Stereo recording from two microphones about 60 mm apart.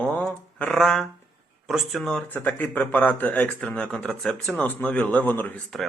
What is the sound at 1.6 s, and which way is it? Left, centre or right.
Speech, centre.